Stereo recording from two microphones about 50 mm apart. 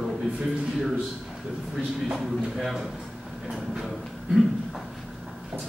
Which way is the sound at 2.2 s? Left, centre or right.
Centre.